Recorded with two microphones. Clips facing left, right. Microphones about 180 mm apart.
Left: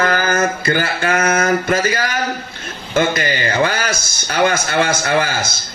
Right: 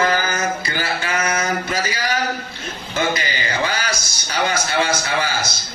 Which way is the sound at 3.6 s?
50° left (ahead or behind).